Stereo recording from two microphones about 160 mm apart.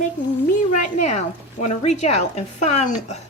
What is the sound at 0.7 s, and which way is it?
A woman's voice, 45° left (ahead or behind).